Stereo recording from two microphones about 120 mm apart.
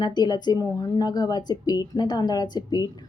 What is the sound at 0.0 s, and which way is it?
Speech, 35° left (ahead or behind).